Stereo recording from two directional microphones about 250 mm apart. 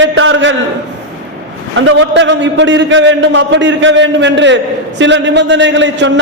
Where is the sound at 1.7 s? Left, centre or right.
Right.